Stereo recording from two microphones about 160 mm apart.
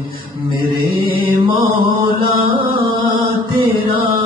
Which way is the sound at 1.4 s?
30° right (ahead or behind).